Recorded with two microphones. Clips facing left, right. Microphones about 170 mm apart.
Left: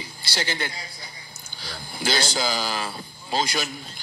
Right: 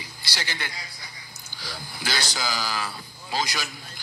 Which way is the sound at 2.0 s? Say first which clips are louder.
Left 6 dB; 25° left (ahead or behind).